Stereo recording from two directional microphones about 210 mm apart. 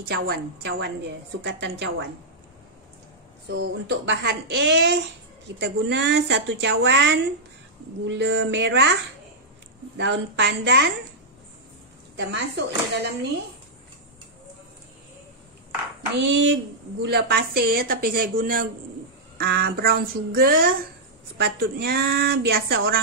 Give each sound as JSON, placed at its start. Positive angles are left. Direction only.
{"t": 0.1, "sound": "a woman's voice", "side_deg": -50}
{"t": 3.4, "sound": "a woman's voice", "side_deg": -55}
{"t": 9.9, "sound": "a woman's voice", "side_deg": -60}
{"t": 12.2, "sound": "a woman's voice", "side_deg": -55}
{"t": 16.2, "sound": "a woman's voice", "side_deg": -60}